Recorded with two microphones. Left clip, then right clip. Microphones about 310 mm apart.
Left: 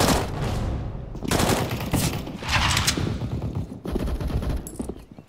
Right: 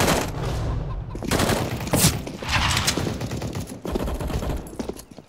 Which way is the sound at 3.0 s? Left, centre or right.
Right.